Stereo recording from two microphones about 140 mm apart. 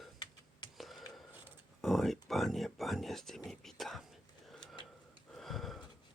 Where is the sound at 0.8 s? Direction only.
Centre (ahead or behind).